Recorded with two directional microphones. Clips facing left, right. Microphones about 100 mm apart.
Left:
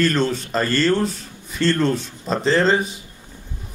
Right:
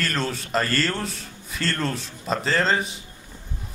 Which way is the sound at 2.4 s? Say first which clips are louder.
Left 6 dB; 5° left (ahead or behind).